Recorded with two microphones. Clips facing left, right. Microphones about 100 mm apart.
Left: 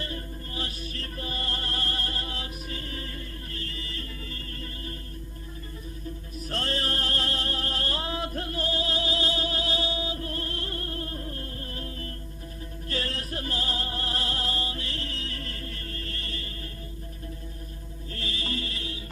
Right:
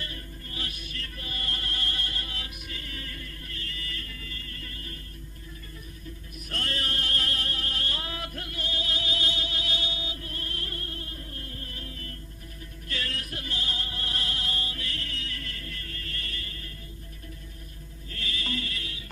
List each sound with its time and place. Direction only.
0.0 s music: 30° left (ahead or behind)
6.5 s music: 30° left (ahead or behind)
18.1 s music: 30° left (ahead or behind)